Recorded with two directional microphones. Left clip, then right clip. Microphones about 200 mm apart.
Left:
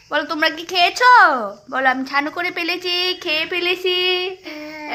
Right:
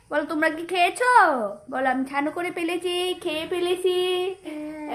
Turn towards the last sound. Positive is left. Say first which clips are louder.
# left 3 dB
turn(degrees=0)  # may be behind; listen again after turning